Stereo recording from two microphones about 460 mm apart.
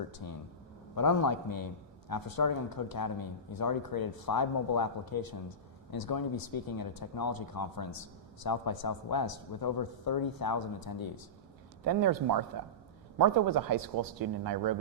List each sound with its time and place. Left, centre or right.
0.1 s speech: left
11.9 s speech: right